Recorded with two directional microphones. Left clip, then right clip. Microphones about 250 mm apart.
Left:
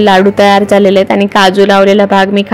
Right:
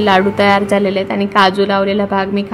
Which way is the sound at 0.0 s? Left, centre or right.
Left.